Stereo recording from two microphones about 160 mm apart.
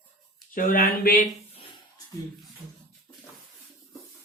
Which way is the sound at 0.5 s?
60° left (ahead or behind).